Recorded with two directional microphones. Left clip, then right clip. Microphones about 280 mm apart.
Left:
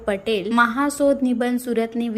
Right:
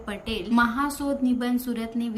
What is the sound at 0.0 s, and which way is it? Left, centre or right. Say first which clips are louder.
A woman's voice: left 10 dB; centre.